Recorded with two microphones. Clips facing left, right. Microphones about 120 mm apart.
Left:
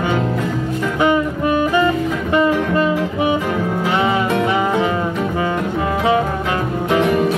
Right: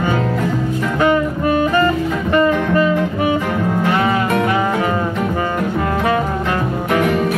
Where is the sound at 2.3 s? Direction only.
10° left (ahead or behind).